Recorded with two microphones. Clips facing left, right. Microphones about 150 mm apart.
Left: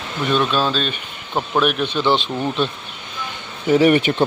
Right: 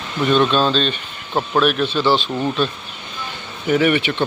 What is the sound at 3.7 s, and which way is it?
Speech, 35° left (ahead or behind).